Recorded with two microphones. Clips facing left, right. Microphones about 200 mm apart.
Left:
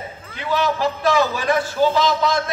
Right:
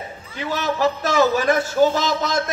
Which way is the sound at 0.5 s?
45° right (ahead or behind).